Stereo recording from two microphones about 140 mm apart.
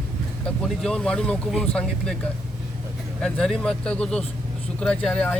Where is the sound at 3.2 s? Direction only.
5° left (ahead or behind).